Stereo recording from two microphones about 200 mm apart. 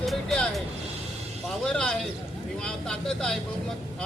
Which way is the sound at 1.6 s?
5° left (ahead or behind).